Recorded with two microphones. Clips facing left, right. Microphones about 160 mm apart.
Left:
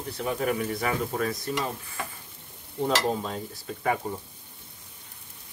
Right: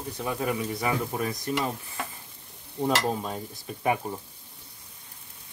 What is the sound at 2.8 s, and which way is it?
Speech, 15° right (ahead or behind).